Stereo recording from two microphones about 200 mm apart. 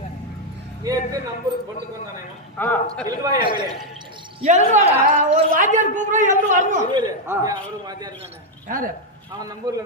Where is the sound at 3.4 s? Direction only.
25° right (ahead or behind).